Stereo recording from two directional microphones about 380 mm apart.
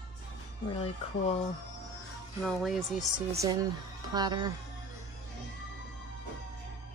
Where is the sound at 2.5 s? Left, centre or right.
Centre.